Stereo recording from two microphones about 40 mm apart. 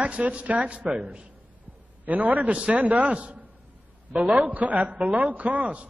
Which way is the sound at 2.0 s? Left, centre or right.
Right.